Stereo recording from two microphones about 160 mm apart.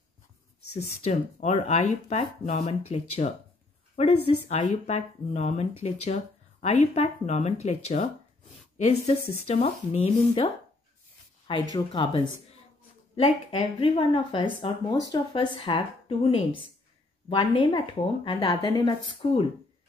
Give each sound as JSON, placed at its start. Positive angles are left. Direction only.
{"t": 1.0, "sound": "speech", "side_deg": 45}